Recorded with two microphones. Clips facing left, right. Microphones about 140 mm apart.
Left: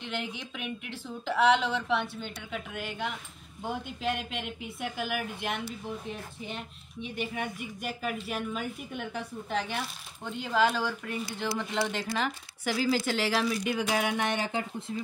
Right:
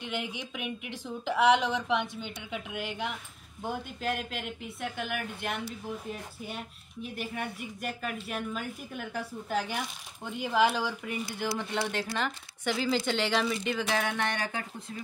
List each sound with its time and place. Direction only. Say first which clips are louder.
0.0 s speech: even; 10° right (ahead or behind)
3.6 s speech: left 1 dB; centre (ahead or behind); by 14.7 s 20° left (ahead or behind)